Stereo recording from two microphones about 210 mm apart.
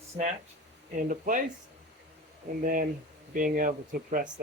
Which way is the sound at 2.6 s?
40° right (ahead or behind).